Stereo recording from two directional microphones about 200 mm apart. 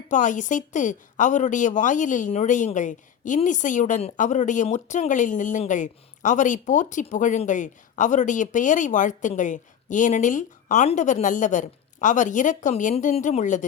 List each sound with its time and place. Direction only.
0.1 s a woman's voice: 40° left (ahead or behind)